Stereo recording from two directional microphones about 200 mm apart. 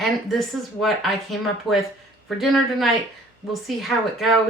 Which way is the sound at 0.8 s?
Centre (ahead or behind).